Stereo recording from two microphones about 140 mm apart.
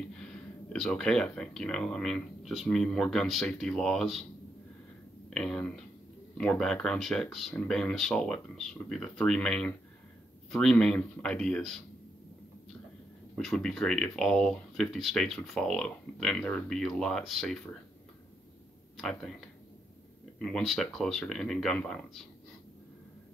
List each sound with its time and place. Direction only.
0.2 s speech: 5° left (ahead or behind)
5.3 s speech: 5° left (ahead or behind)
13.4 s speech: centre (ahead or behind)
18.9 s speech: centre (ahead or behind)
20.3 s speech: 5° left (ahead or behind)